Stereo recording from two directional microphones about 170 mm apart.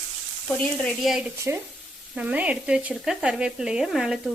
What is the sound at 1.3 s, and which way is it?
Speech, 15° right (ahead or behind).